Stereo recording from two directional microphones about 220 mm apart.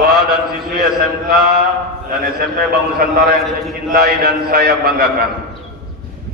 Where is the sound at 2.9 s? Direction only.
45° right (ahead or behind).